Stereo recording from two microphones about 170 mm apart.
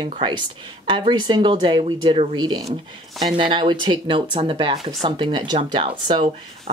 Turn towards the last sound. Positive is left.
turn(degrees=-30)  # may be behind; listen again after turning